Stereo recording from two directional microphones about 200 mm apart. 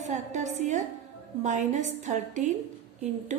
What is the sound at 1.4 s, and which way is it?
A woman's voice, 35° right (ahead or behind).